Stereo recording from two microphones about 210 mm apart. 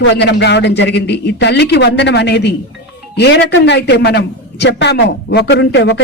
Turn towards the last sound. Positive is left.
turn(degrees=55)  # may be behind; listen again after turning